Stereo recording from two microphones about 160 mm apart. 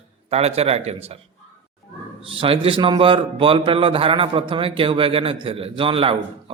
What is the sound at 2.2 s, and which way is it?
A man's voice, 35° right (ahead or behind).